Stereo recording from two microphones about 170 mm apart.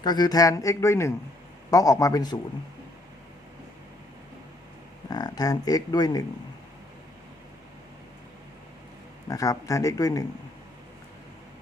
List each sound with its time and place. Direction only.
0.0 s speech: 25° left (ahead or behind)
5.0 s speech: 25° left (ahead or behind)
9.3 s speech: 20° left (ahead or behind)